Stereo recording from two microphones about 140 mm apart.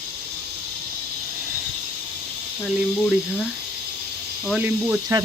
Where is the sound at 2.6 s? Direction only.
5° right (ahead or behind).